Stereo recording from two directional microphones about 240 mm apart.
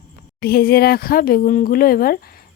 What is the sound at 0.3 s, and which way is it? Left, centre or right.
Speech, left.